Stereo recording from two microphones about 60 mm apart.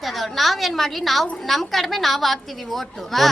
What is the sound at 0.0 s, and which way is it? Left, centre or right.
A woman's voice, centre.